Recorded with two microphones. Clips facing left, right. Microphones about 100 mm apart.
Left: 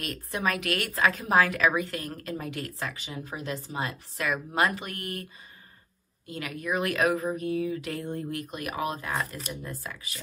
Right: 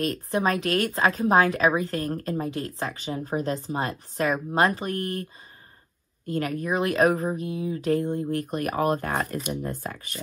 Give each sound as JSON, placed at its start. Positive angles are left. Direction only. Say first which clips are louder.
{"t": 0.0, "sound": "a woman's voice", "louder": "right 6 dB", "side_deg": -35}